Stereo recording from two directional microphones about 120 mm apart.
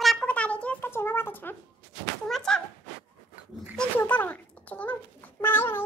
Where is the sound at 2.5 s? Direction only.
5° left (ahead or behind).